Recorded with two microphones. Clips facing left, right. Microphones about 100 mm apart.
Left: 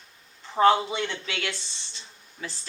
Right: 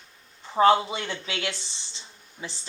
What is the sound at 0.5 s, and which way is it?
Speech, 25° right (ahead or behind).